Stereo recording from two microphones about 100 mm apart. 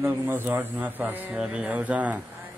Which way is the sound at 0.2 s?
20° right (ahead or behind).